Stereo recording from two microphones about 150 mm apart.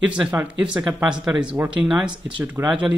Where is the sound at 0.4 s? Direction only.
10° right (ahead or behind).